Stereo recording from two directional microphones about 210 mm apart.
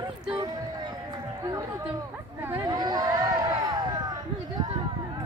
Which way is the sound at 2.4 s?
10° right (ahead or behind).